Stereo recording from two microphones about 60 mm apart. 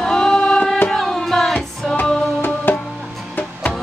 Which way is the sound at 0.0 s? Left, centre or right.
Centre.